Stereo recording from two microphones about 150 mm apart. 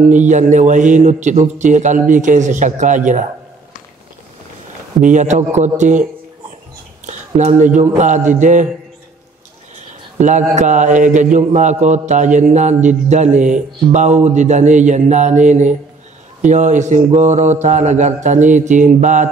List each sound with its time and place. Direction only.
0.1 s a man's voice: 55° right (ahead or behind)
5.0 s a man's voice: 55° right (ahead or behind)
7.1 s a man's voice: 50° right (ahead or behind)
10.1 s a man's voice: 55° right (ahead or behind)